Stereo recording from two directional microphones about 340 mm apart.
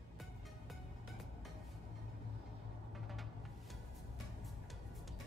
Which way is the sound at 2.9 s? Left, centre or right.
Centre.